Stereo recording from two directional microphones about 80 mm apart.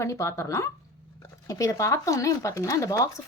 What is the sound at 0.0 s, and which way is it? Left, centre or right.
Speech, left.